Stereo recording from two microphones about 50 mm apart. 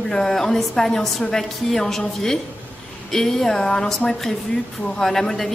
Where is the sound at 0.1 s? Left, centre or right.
Centre.